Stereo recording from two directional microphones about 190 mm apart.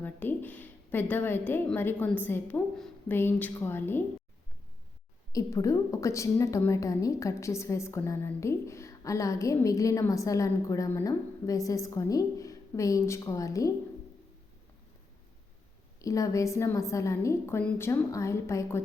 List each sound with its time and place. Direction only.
0.0 s a woman's voice: 10° left (ahead or behind)
5.3 s a woman's voice: 20° left (ahead or behind)
16.0 s a woman's voice: 15° left (ahead or behind)